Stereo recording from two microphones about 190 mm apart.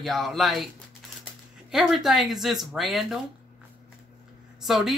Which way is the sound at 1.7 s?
Centre (ahead or behind).